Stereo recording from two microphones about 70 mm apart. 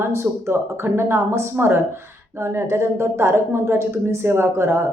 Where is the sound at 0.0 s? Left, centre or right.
Right.